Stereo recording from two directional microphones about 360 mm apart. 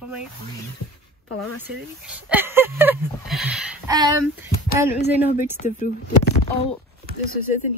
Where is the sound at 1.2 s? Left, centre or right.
Left.